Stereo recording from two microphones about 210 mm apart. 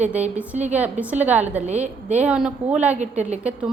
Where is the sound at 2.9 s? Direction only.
35° right (ahead or behind).